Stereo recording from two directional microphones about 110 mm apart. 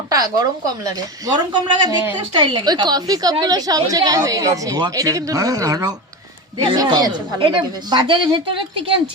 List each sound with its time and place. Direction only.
0.1 s a woman's voice: 35° right (ahead or behind); by 9.0 s 50° right (ahead or behind)